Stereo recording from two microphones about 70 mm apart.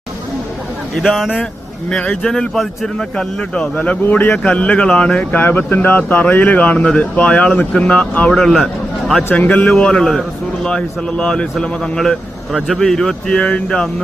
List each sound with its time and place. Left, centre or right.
1.0 s speech: centre
1.9 s a man's voice: centre
5.4 s speech: left; by 9.2 s centre
9.4 s speech: left
9.6 s a man's voice: centre